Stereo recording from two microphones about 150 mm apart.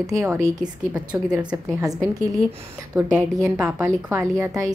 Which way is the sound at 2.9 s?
15° right (ahead or behind).